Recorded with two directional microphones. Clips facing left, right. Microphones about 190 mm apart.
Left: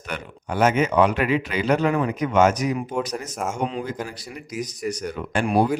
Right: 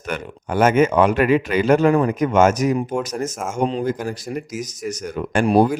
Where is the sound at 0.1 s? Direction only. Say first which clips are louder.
Right 5 dB; 50° right (ahead or behind).